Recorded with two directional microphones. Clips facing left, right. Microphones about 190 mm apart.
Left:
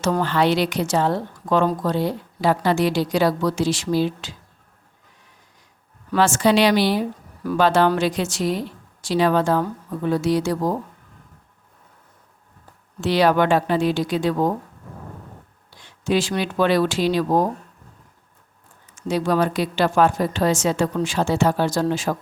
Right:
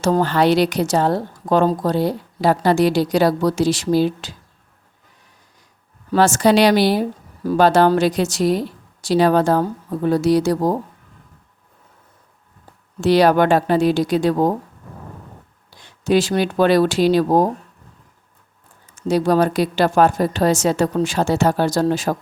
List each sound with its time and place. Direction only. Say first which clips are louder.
0.0 s speech: right 3 dB; 40° right (ahead or behind)
6.1 s speech: right 3 dB; 40° right (ahead or behind)
13.0 s speech: right 4 dB; 40° right (ahead or behind)
15.8 s speech: right 4 dB; 40° right (ahead or behind)
18.9 s speech: right 4 dB; 35° right (ahead or behind)